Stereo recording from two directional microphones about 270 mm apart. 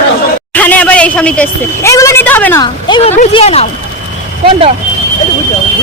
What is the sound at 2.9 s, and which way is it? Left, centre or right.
Speech, left.